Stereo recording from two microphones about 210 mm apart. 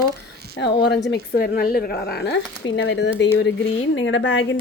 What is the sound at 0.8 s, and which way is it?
Speech, 55° left (ahead or behind).